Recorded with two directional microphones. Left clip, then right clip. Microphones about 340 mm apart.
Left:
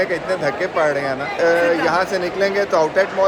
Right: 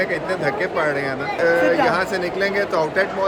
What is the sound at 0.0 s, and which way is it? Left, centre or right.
Speech, centre.